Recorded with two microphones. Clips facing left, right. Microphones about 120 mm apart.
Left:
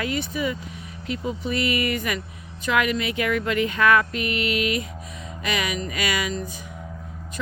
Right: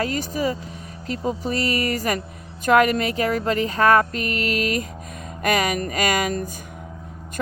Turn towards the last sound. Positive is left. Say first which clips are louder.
# right 4 dB
turn(degrees=-45)  # may be behind; listen again after turning